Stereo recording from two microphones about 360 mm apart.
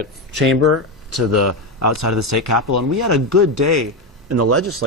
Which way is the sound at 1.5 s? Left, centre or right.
Right.